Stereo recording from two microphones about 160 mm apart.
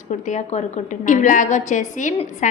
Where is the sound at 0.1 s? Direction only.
50° left (ahead or behind).